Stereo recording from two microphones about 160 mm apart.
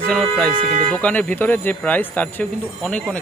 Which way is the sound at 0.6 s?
45° right (ahead or behind).